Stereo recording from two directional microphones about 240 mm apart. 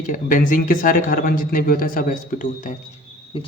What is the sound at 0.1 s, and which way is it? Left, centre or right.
Speech, left.